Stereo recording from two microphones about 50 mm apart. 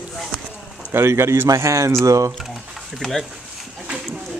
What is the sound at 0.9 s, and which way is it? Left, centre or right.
Speech, right.